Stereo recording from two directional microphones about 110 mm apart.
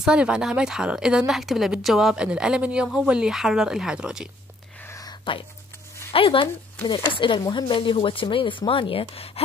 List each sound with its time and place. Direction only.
0.0 s a woman's voice: 10° right (ahead or behind)
4.8 s a sound: 30° left (ahead or behind)
6.1 s speech: 55° left (ahead or behind)